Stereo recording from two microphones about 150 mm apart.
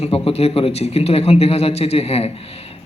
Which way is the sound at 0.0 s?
45° left (ahead or behind).